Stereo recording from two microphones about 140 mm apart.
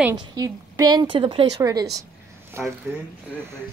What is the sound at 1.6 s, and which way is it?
A woman's voice, 25° right (ahead or behind).